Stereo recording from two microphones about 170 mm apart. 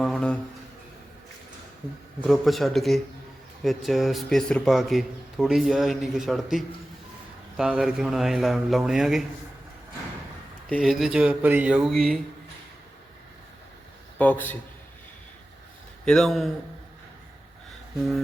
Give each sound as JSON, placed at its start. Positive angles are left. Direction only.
{"t": 0.0, "sound": "a sound", "side_deg": 5}
{"t": 2.2, "sound": "speech", "side_deg": 0}
{"t": 10.8, "sound": "speech", "side_deg": -5}
{"t": 14.2, "sound": "a man's voice", "side_deg": 10}
{"t": 16.0, "sound": "speech", "side_deg": 0}